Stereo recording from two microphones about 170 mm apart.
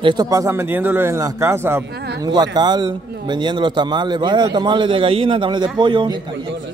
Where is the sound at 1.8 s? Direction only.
75° right (ahead or behind).